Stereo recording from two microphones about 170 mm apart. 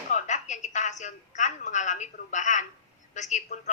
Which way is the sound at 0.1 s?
45° left (ahead or behind).